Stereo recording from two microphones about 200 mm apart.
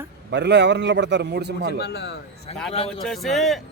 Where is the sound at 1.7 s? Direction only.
55° left (ahead or behind).